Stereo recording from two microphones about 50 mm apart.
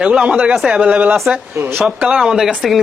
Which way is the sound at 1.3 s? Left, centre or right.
Right.